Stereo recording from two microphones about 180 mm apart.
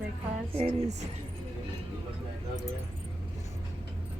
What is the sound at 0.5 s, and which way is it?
Speech, 35° right (ahead or behind).